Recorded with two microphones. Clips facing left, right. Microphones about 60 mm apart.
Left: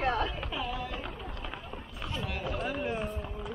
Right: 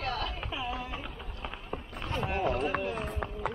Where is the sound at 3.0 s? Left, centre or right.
Right.